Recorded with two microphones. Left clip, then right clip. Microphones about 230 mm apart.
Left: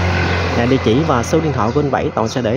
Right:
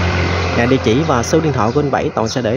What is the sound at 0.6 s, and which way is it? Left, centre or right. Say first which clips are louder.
Speech: right 1 dB; centre.